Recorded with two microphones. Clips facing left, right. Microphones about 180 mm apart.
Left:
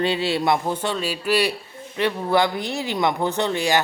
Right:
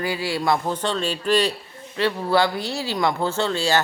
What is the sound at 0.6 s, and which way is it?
Speech, 10° left (ahead or behind).